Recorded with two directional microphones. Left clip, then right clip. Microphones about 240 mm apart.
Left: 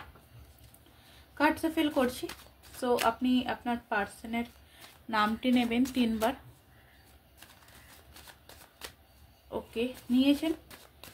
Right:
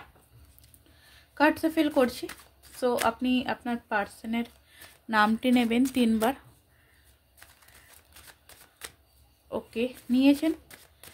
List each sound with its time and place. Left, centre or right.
1.4 s speech: right
9.5 s speech: right